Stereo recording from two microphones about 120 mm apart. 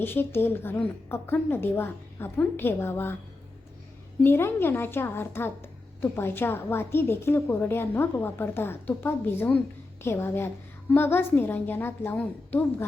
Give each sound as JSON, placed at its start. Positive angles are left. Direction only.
{"t": 0.0, "sound": "speech", "side_deg": 20}
{"t": 4.2, "sound": "a woman's voice", "side_deg": 20}